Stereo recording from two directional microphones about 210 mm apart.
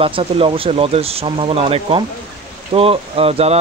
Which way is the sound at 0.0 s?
25° right (ahead or behind).